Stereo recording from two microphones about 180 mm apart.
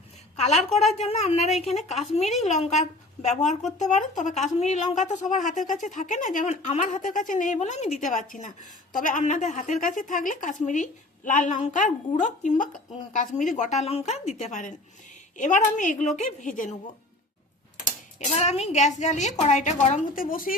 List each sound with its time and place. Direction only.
0.3 s a woman's voice: 40° left (ahead or behind)
18.3 s a woman's voice: 40° left (ahead or behind)